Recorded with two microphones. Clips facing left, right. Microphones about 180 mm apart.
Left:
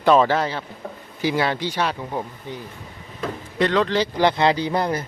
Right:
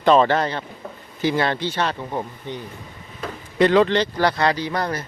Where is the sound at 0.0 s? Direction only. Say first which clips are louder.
Right 1 dB; 5° left (ahead or behind).